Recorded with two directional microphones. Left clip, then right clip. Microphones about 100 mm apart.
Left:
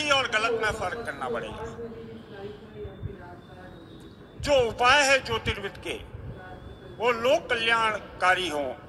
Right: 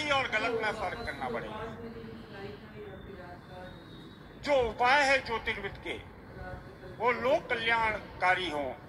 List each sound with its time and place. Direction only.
0.0 s a man's voice: 35° left (ahead or behind)
4.4 s a man's voice: 35° left (ahead or behind)
7.0 s a man's voice: 40° left (ahead or behind)